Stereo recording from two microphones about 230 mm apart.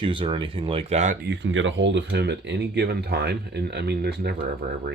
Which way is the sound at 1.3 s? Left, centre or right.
Right.